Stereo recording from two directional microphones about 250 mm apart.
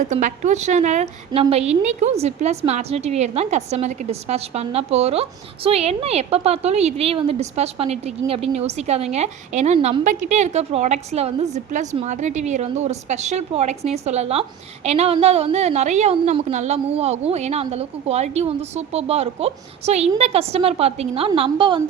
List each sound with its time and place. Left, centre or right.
0.0 s a woman's voice: right